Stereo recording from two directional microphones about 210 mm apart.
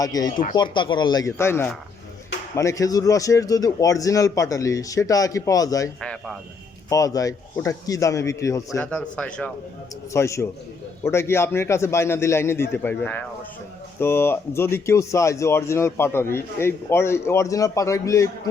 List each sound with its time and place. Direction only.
0.0 s speech: 15° left (ahead or behind)
6.0 s a sound: 5° left (ahead or behind)
6.9 s speech: 15° left (ahead or behind)